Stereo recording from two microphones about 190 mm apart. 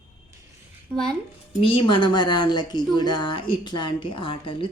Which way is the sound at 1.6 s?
25° left (ahead or behind).